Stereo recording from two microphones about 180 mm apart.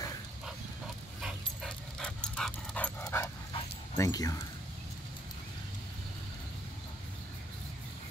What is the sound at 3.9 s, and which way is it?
Speech, 20° left (ahead or behind).